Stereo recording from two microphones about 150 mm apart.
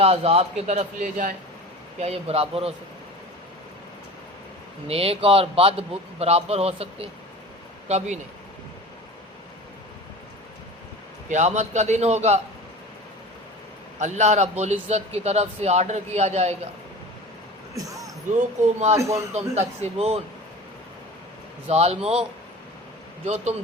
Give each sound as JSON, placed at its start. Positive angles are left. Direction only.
{"t": 0.0, "sound": "a man's voice", "side_deg": -45}
{"t": 2.0, "sound": "a man's voice", "side_deg": -45}
{"t": 4.9, "sound": "a man's voice", "side_deg": -40}
{"t": 11.3, "sound": "a man's voice", "side_deg": -50}
{"t": 14.0, "sound": "a man's voice", "side_deg": -50}
{"t": 17.7, "sound": "basketball bounce", "side_deg": -25}
{"t": 18.6, "sound": "a man's voice", "side_deg": -55}
{"t": 18.9, "sound": "a man's voice", "side_deg": -20}
{"t": 19.3, "sound": "a man's voice", "side_deg": -45}
{"t": 21.7, "sound": "a man's voice", "side_deg": -45}
{"t": 23.2, "sound": "a man's voice", "side_deg": -45}